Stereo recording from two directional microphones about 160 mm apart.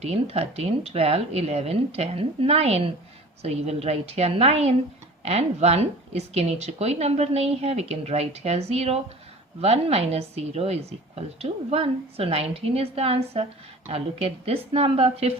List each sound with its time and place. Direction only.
0.0 s a woman's voice: 40° right (ahead or behind)